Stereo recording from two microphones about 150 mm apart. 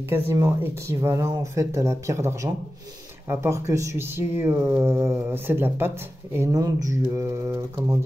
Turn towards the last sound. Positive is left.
turn(degrees=-20)  # may be behind; listen again after turning